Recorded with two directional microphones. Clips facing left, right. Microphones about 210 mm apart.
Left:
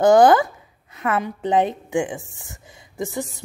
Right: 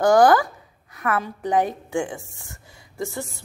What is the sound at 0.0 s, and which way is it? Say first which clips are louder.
A woman's voice: left 2 dB; 20° left (ahead or behind).